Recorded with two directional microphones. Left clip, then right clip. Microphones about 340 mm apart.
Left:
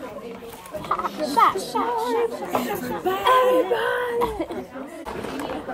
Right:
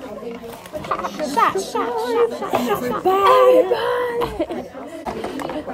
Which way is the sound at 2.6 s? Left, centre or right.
Centre.